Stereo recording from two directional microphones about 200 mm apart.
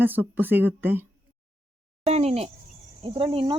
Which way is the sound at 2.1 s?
30° right (ahead or behind).